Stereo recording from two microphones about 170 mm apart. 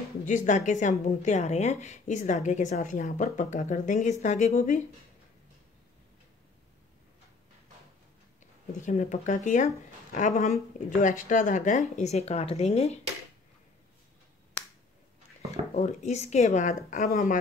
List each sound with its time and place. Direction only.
0.2 s a woman's voice: 50° left (ahead or behind)
8.7 s a woman's voice: 45° left (ahead or behind)
15.7 s a woman's voice: 40° left (ahead or behind)